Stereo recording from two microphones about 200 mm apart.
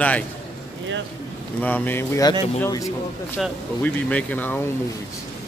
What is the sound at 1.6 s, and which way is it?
Speech, 10° left (ahead or behind).